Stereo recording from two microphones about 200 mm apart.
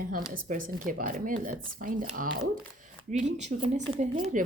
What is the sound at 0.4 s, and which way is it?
Speech, 45° right (ahead or behind).